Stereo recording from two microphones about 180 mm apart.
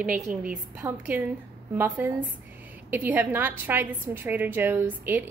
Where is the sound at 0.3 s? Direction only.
5° right (ahead or behind).